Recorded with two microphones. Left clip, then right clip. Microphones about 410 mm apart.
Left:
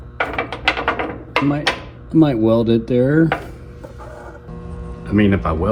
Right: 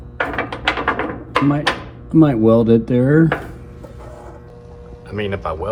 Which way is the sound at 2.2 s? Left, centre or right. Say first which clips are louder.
Right 2 dB; right.